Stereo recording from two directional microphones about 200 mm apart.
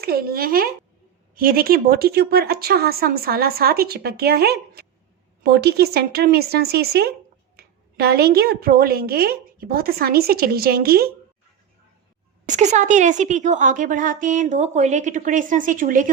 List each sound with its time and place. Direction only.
0.0 s a woman's voice: 50° right (ahead or behind)
12.5 s a woman's voice: 35° right (ahead or behind)